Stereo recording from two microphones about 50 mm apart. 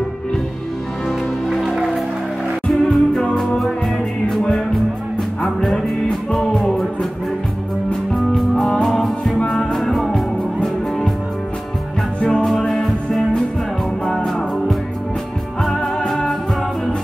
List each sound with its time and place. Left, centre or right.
1.5 s music: centre
5.4 s music: centre
8.4 s music: centre
12.2 s music: centre
12.4 s music: centre